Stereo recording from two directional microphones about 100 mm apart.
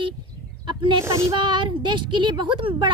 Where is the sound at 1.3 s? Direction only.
50° right (ahead or behind).